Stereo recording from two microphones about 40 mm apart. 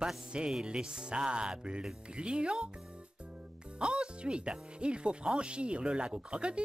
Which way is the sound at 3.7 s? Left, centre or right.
Right.